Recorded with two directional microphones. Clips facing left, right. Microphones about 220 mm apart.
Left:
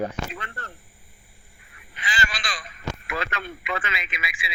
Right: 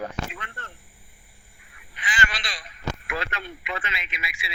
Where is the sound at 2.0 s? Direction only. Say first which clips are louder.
Even; 40° left (ahead or behind).